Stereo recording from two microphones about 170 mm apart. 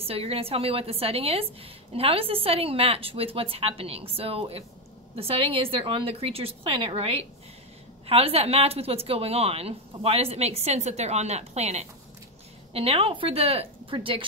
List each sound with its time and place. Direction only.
0.0 s a woman's voice: 35° right (ahead or behind)